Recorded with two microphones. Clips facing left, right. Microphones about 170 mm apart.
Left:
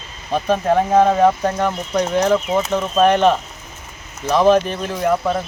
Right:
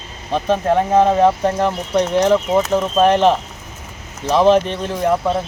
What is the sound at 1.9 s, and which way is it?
Speech, 30° right (ahead or behind).